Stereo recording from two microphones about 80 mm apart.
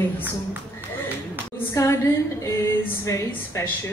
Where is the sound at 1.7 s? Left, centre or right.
Left.